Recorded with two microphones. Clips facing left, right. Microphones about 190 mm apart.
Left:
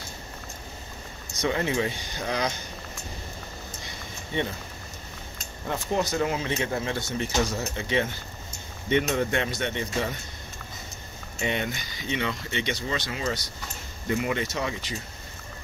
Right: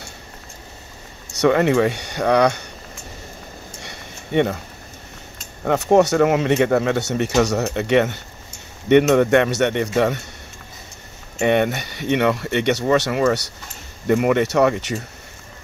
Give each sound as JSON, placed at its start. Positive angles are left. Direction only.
{"t": 1.4, "sound": "speech", "side_deg": -65}
{"t": 3.8, "sound": "a sound", "side_deg": -65}
{"t": 5.6, "sound": "speech", "side_deg": -70}
{"t": 11.3, "sound": "speech", "side_deg": -60}